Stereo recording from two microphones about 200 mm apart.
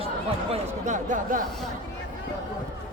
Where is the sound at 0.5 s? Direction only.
40° right (ahead or behind).